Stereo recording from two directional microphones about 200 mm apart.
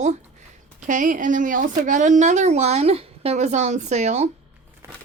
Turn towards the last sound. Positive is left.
turn(degrees=-35)  # may be behind; listen again after turning